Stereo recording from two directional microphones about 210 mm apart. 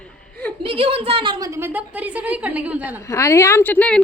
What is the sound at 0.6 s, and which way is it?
A woman's voice, 25° right (ahead or behind).